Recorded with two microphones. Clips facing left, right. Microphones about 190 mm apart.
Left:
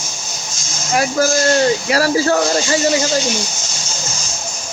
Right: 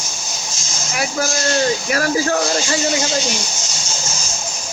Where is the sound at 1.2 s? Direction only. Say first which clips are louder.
Left 4 dB; 45° left (ahead or behind).